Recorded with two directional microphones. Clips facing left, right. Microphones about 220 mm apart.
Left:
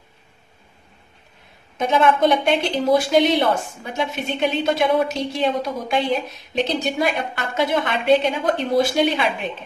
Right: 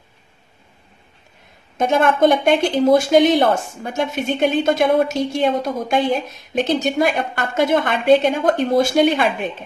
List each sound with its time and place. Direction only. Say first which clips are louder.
1.8 s speech: right 2 dB; 50° right (ahead or behind)